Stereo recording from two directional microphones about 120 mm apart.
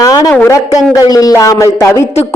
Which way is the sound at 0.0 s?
30° left (ahead or behind).